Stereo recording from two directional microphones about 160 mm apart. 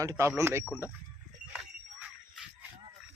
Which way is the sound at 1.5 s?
10° right (ahead or behind).